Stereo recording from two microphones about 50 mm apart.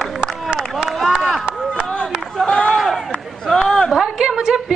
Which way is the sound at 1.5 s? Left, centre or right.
Right.